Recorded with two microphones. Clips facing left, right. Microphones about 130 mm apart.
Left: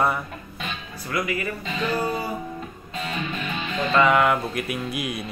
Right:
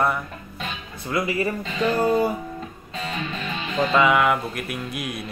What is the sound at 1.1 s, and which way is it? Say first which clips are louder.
Speech: right 3 dB; 25° right (ahead or behind).